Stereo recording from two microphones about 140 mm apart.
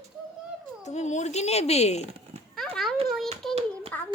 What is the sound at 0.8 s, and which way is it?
A child's voice, 55° left (ahead or behind).